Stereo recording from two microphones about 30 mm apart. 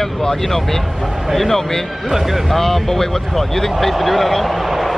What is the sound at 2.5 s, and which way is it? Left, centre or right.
Speech, centre.